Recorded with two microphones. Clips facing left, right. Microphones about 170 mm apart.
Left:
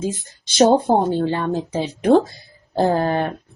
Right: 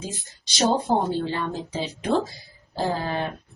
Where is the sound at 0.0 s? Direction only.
50° left (ahead or behind).